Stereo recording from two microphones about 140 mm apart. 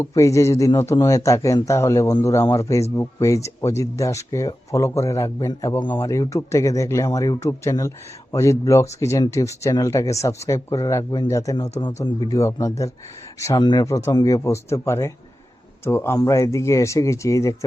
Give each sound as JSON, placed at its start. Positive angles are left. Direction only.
{"t": 0.0, "sound": "speech", "side_deg": 20}